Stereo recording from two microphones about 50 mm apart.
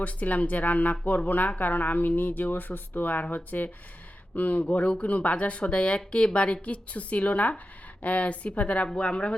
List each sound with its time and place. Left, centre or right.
0.0 s speech: left